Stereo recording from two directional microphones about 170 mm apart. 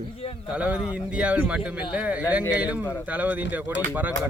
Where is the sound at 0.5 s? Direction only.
5° right (ahead or behind).